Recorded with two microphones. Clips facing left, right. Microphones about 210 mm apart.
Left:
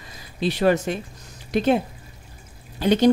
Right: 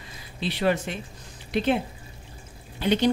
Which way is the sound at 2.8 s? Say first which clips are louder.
Left 5 dB; 40° left (ahead or behind).